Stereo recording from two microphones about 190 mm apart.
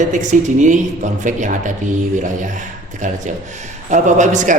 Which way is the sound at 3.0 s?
40° right (ahead or behind).